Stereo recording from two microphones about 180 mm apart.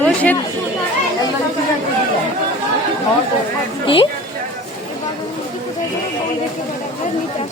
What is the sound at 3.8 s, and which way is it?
Speech, 30° left (ahead or behind).